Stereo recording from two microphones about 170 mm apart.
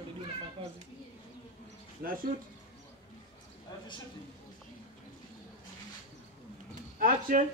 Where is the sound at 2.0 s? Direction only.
60° right (ahead or behind).